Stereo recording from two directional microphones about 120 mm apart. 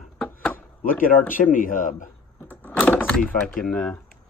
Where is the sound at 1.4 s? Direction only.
90° left.